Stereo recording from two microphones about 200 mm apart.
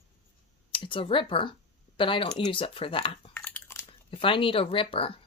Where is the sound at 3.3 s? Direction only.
10° left (ahead or behind).